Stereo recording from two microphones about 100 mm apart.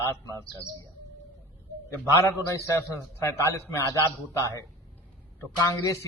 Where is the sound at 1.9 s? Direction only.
25° left (ahead or behind).